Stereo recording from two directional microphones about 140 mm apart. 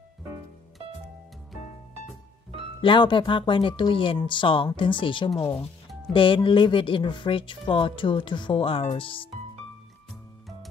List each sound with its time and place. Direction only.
2.8 s speech: 35° left (ahead or behind)